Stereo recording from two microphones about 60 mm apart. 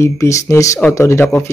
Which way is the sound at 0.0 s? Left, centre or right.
Left.